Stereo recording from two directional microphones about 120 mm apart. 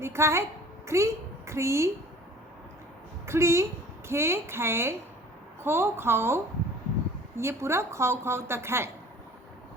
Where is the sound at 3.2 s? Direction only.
25° right (ahead or behind).